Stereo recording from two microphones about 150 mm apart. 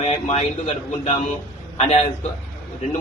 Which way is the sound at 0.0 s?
45° left (ahead or behind).